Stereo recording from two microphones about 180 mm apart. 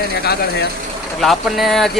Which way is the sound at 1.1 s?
Centre (ahead or behind).